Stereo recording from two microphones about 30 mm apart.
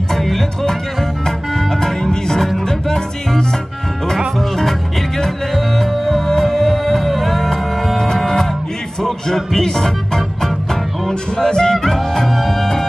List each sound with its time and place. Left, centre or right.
0.1 s music: centre
5.8 s music: centre